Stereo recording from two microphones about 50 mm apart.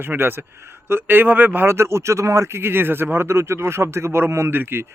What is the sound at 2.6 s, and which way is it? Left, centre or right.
Speech, right.